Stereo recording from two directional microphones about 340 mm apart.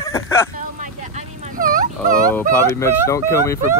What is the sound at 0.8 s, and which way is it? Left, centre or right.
Vehicle, right.